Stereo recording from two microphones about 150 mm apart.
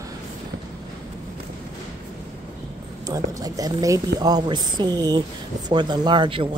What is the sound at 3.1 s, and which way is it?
Speech, 25° right (ahead or behind).